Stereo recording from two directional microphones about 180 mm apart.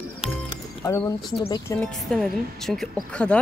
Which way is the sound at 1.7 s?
15° left (ahead or behind).